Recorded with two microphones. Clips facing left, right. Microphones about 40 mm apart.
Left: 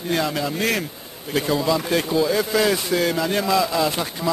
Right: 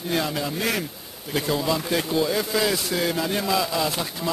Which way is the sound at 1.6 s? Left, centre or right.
Centre.